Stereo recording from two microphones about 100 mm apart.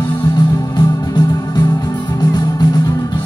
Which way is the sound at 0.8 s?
45° left (ahead or behind).